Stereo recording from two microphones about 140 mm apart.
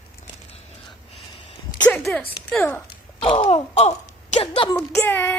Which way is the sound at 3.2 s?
40° left (ahead or behind).